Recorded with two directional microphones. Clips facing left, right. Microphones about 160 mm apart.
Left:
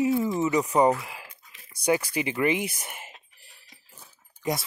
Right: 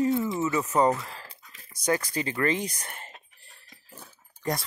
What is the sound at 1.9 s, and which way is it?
Speech, 10° left (ahead or behind).